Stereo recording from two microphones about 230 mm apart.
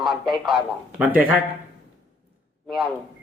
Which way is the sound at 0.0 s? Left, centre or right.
Centre.